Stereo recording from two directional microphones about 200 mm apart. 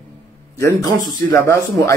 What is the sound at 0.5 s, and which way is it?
Speech, 10° left (ahead or behind).